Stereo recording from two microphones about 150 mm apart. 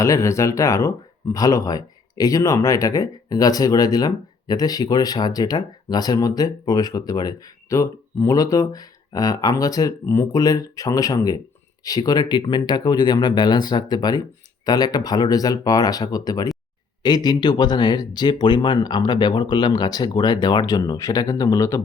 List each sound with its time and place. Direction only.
0.0 s speech: 20° left (ahead or behind)